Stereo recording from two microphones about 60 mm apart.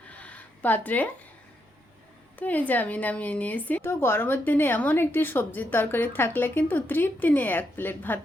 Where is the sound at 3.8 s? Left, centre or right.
Left.